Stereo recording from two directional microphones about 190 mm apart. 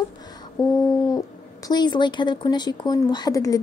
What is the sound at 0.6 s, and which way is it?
A woman's voice, 20° left (ahead or behind).